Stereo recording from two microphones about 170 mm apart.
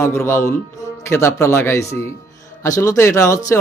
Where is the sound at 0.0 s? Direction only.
15° left (ahead or behind).